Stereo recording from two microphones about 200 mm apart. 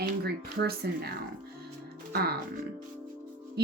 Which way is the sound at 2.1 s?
50° right (ahead or behind).